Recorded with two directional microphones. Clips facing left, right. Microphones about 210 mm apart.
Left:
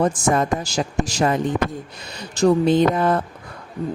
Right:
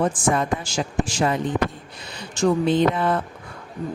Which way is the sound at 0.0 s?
40° left (ahead or behind).